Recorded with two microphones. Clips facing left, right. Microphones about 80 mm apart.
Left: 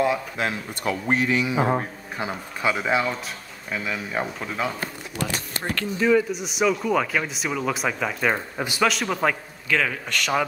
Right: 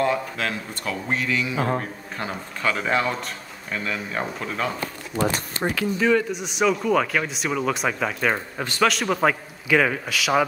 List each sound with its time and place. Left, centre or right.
0.4 s a man's voice: centre
5.1 s speech: right
5.8 s speech: centre